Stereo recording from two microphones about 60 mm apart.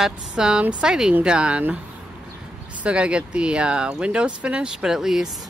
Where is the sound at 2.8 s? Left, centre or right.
Centre.